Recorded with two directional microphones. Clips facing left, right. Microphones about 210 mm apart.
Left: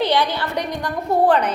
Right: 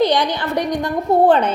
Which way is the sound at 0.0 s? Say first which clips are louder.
Right 3 dB; 15° right (ahead or behind).